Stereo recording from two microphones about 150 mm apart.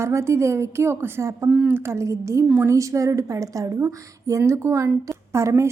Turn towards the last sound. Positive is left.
turn(degrees=-20)  # may be behind; listen again after turning